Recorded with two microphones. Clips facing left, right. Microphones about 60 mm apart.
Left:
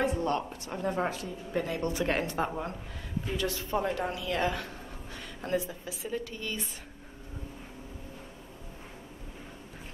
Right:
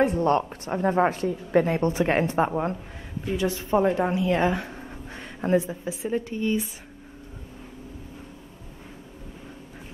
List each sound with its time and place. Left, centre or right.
0.2 s speech: right